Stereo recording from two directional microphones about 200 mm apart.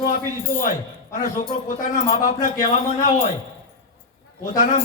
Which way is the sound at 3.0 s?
40° left (ahead or behind).